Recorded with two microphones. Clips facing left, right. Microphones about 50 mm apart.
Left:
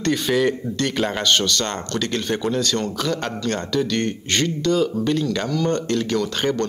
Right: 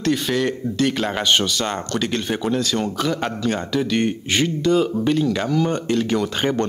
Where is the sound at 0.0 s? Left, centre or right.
Centre.